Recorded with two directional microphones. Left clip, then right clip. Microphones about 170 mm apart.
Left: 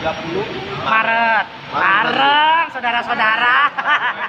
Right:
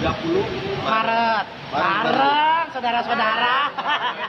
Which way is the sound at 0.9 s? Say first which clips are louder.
Left 5 dB; 20° right (ahead or behind).